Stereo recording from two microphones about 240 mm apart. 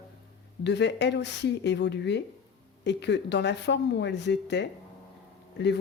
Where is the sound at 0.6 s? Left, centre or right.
Left.